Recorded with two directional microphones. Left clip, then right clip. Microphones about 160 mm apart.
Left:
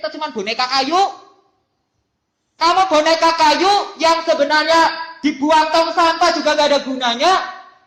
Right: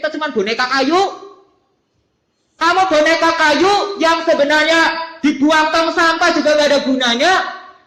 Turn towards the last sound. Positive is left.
turn(degrees=0)  # may be behind; listen again after turning